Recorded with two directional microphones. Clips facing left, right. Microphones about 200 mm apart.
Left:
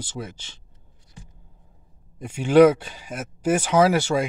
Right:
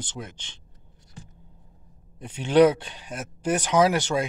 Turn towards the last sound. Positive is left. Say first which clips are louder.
# left 2 dB
turn(degrees=10)  # may be behind; listen again after turning